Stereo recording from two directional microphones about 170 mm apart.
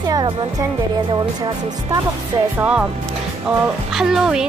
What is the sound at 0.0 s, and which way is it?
Music, 25° right (ahead or behind).